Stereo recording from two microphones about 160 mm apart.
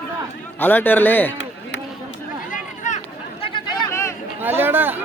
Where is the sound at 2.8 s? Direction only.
50° left (ahead or behind).